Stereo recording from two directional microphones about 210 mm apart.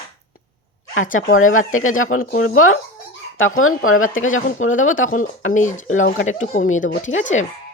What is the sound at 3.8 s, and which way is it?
Speech, 80° left.